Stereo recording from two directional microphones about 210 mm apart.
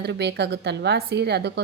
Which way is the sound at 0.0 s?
55° right (ahead or behind).